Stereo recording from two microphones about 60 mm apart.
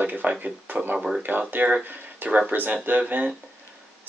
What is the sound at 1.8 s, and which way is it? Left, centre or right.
Speech, right.